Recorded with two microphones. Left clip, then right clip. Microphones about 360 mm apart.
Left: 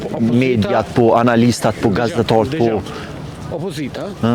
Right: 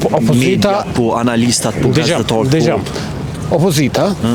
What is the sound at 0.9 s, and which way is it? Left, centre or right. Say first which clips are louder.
Speech: left 2 dB; left.